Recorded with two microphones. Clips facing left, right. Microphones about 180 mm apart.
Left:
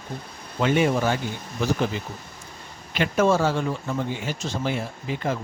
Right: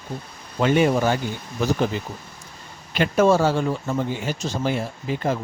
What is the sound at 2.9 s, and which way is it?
Speech, 35° right (ahead or behind).